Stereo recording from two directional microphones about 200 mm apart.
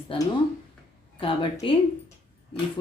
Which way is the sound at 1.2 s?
25° left (ahead or behind).